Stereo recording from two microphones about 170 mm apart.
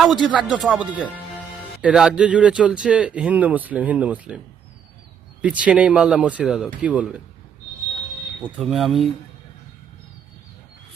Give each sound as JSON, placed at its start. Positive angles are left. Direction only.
{"t": 0.0, "sound": "speech", "side_deg": 0}
{"t": 5.4, "sound": "speech", "side_deg": -10}
{"t": 8.4, "sound": "speech", "side_deg": -5}